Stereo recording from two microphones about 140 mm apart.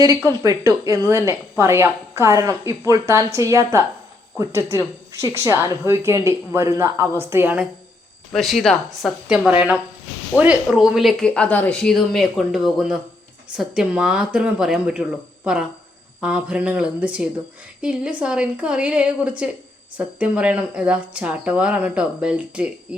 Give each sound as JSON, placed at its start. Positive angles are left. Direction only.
{"t": 0.3, "sound": "a woman's voice", "side_deg": -25}
{"t": 8.3, "sound": "speech", "side_deg": 0}